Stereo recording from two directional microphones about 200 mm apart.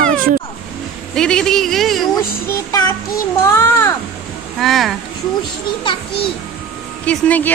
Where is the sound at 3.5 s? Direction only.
15° left (ahead or behind).